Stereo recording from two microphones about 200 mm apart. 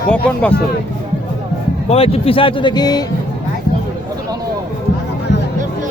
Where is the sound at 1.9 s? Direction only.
30° left (ahead or behind).